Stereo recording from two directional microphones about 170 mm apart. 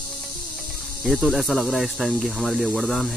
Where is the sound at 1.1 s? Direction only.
Centre (ahead or behind).